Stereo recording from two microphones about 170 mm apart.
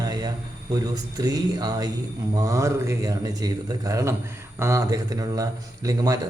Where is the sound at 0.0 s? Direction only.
25° right (ahead or behind).